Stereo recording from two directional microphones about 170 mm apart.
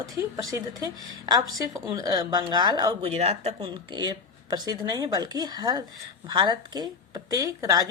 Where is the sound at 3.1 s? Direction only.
40° right (ahead or behind).